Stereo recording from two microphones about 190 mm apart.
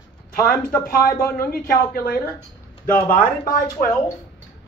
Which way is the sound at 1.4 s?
50° left (ahead or behind).